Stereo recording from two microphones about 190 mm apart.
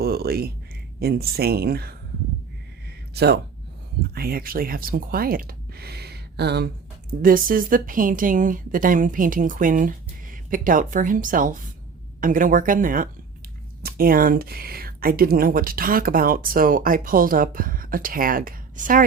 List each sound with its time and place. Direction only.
0.0 s a sound: 55° right (ahead or behind)
0.9 s speech: 55° right (ahead or behind)
3.2 s speech: 60° right (ahead or behind)
7.2 s speech: 50° right (ahead or behind)